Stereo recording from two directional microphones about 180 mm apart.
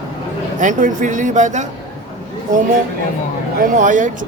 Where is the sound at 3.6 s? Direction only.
45° right (ahead or behind).